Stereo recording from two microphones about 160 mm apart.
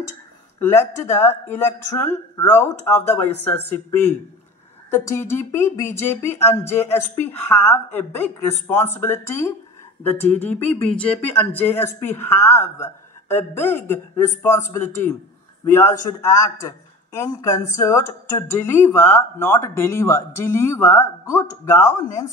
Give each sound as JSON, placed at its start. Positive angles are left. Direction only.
{"t": 0.6, "sound": "speech", "side_deg": 15}
{"t": 4.9, "sound": "a woman's voice", "side_deg": 15}